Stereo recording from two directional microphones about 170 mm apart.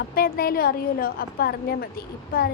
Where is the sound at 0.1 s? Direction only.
60° left (ahead or behind).